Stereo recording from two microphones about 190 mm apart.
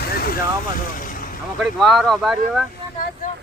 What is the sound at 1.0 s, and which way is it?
Vehicle, 45° left (ahead or behind).